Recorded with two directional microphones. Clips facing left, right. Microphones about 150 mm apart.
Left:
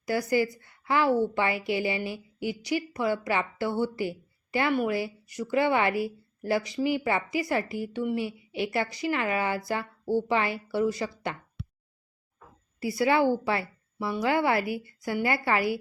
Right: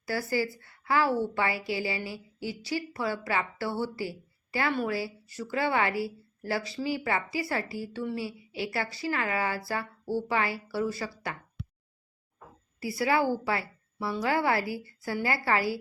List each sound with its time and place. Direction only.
0.0 s a woman's voice: 20° left (ahead or behind)
12.8 s a woman's voice: 20° left (ahead or behind)